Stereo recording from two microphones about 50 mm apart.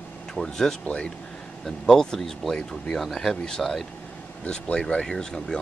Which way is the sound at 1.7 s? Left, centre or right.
Centre.